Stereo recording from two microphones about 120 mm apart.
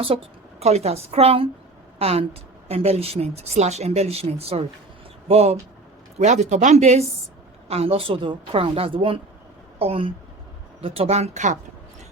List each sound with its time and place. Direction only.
0.0 s a woman's voice: 50° right (ahead or behind)
6.1 s a woman's voice: 70° right (ahead or behind)